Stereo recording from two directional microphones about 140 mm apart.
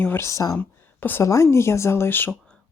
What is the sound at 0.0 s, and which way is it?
Speech, 15° left (ahead or behind).